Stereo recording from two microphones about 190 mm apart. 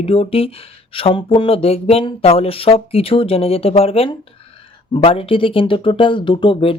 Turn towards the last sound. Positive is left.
turn(degrees=30)  # may be behind; listen again after turning